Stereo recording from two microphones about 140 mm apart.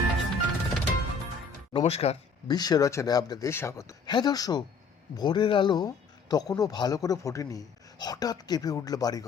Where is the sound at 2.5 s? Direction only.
30° left (ahead or behind).